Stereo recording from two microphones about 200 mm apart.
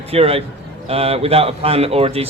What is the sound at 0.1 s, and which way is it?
A man's voice, 30° right (ahead or behind).